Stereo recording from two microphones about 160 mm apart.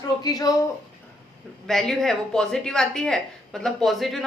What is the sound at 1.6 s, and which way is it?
Speech, 5° left (ahead or behind).